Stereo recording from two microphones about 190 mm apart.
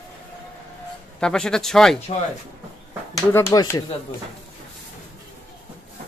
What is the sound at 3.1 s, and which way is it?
Speech, 15° left (ahead or behind).